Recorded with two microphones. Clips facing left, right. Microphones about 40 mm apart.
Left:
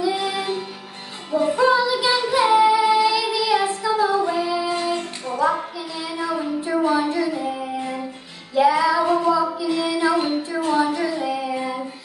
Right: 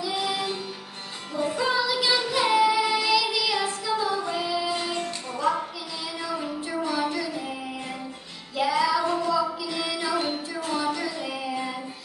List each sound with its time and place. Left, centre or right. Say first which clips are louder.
0.0 s music: left 5 dB; centre
1.3 s child singing: left 8 dB; centre
4.7 s music: left 5 dB; centre
6.7 s a sound: left 10 dB; left
7.0 s child singing: left 6 dB; centre
8.5 s child singing: left 6 dB; centre
9.9 s music: left 6 dB; centre